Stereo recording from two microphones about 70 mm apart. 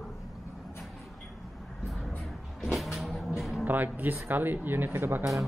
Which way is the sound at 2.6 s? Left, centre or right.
Centre.